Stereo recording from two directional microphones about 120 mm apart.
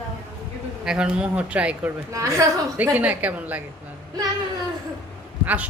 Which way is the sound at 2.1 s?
25° right (ahead or behind).